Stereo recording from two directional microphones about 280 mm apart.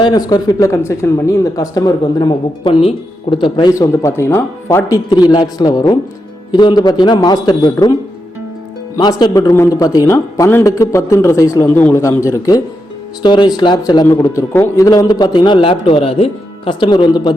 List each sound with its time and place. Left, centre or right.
0.0 s speech: centre
9.0 s speech: centre